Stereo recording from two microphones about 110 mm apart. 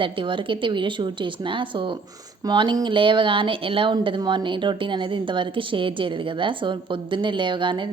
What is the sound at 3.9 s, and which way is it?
A woman's voice, 45° right (ahead or behind).